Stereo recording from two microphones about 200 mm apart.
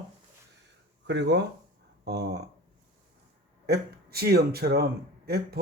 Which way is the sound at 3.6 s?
50° right (ahead or behind).